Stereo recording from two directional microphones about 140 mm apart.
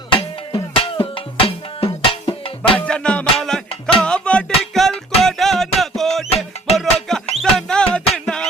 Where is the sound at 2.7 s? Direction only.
5° left (ahead or behind).